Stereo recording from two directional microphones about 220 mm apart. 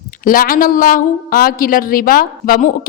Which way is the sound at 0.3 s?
40° left (ahead or behind).